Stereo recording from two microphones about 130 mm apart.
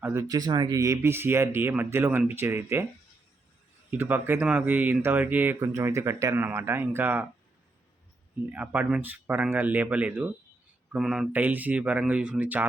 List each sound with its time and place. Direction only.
0.0 s speech: 20° right (ahead or behind)
3.9 s speech: 15° right (ahead or behind)
8.4 s speech: 10° right (ahead or behind)
10.9 s speech: 5° right (ahead or behind)